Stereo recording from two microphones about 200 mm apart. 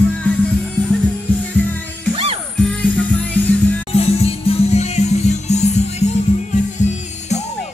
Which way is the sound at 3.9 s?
30° left (ahead or behind).